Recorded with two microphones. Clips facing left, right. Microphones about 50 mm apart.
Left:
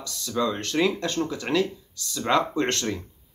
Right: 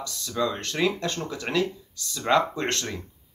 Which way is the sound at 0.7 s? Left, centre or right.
Centre.